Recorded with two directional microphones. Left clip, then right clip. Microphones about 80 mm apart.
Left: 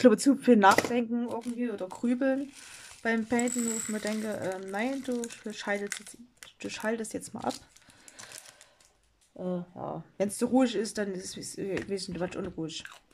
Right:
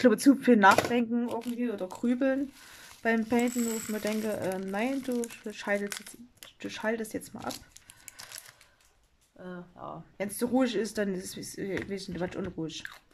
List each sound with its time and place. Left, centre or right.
0.0 s speech: centre
0.9 s speech: centre
1.3 s speech: centre
1.6 s speech: centre
7.5 s speech: left
9.4 s speech: left
10.5 s speech: centre